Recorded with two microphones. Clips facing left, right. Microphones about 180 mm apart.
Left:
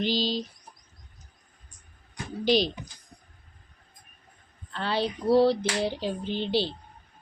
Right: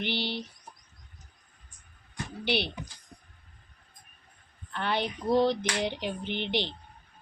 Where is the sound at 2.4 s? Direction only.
65° right (ahead or behind).